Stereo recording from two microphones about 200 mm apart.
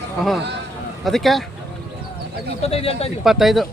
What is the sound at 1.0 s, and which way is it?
Speech, centre (ahead or behind).